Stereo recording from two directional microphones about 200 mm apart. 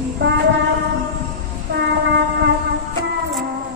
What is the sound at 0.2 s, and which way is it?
Music, 65° right (ahead or behind).